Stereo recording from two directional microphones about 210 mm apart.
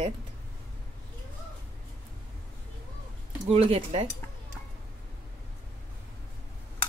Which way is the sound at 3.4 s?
30° right (ahead or behind).